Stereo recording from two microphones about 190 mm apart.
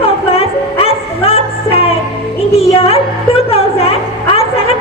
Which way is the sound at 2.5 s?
30° left (ahead or behind).